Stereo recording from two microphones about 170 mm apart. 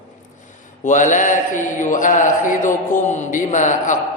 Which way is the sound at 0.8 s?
50° left (ahead or behind).